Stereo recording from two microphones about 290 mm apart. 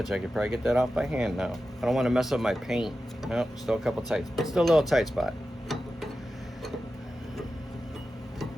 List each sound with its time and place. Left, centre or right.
0.0 s speech: centre